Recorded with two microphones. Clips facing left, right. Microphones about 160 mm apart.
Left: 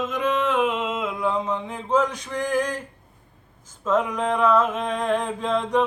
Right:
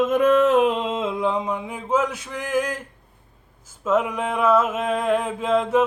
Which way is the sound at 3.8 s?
10° right (ahead or behind).